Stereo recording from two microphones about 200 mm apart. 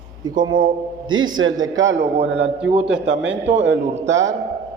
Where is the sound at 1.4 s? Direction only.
75° right (ahead or behind).